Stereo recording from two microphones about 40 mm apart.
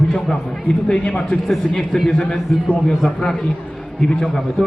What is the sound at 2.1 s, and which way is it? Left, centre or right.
Speech, left.